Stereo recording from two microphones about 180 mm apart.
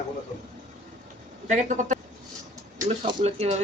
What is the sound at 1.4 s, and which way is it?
Speech, 45° right (ahead or behind).